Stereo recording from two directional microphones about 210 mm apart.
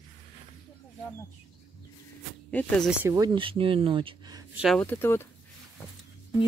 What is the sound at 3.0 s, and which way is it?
Speech, 15° right (ahead or behind).